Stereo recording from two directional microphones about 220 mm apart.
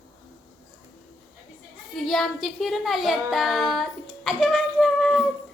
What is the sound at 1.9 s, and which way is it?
Speech, centre (ahead or behind).